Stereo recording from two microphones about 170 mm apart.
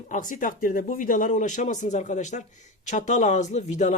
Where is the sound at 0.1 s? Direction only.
50° left (ahead or behind).